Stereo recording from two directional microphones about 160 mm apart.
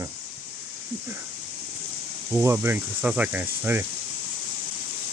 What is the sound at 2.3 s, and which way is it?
Speech, 15° right (ahead or behind).